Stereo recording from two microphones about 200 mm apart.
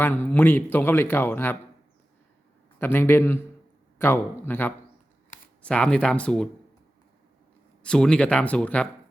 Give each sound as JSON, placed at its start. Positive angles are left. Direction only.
{"t": 0.0, "sound": "speech", "side_deg": 10}
{"t": 2.7, "sound": "speech", "side_deg": 10}
{"t": 7.8, "sound": "speech", "side_deg": 5}